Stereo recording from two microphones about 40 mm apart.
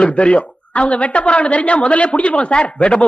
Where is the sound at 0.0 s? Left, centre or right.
Left.